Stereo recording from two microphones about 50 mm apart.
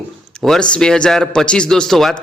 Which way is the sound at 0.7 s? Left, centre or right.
Centre.